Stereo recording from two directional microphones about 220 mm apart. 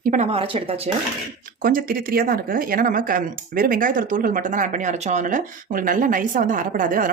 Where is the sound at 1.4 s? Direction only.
40° right (ahead or behind).